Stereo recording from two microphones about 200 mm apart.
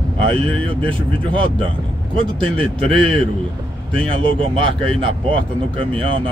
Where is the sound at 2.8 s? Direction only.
25° right (ahead or behind).